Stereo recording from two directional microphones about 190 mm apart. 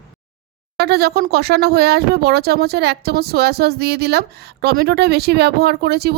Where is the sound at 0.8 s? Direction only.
55° right (ahead or behind).